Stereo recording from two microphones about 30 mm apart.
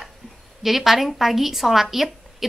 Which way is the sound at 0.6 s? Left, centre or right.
Centre.